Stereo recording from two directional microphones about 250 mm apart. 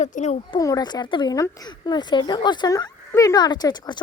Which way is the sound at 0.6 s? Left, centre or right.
Centre.